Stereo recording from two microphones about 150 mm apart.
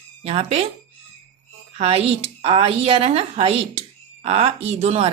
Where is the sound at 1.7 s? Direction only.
40° right (ahead or behind).